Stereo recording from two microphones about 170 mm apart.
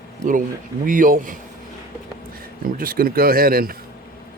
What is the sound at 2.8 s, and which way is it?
Speech, 60° right (ahead or behind).